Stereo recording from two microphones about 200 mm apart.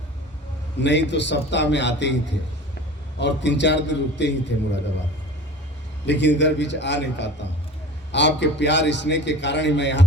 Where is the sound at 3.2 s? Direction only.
60° left (ahead or behind).